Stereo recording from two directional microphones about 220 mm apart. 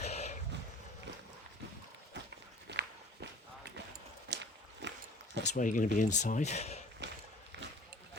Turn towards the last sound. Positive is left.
turn(degrees=-50)  # may be behind; listen again after turning